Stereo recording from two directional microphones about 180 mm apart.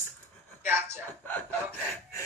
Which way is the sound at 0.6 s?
10° right (ahead or behind).